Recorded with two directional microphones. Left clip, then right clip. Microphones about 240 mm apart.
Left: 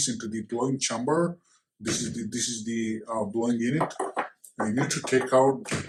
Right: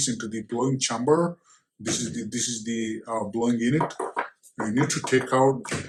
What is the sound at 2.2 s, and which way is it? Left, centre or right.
Speech, right.